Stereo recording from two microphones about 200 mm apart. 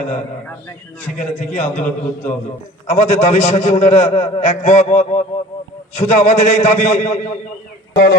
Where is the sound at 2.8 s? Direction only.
30° left (ahead or behind).